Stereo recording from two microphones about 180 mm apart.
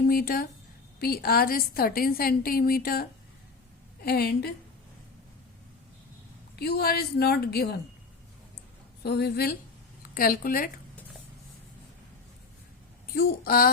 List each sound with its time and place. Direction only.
0.1 s a woman's voice: 55° left (ahead or behind)
6.6 s a woman's voice: 65° left (ahead or behind)
9.0 s a woman's voice: 65° left (ahead or behind)
13.1 s a woman's voice: 55° left (ahead or behind)